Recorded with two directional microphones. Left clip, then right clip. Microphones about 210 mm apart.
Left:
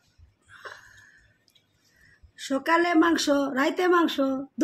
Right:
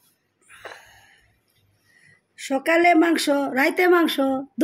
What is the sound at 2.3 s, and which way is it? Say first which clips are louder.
Speech: right 3 dB; 15° right (ahead or behind).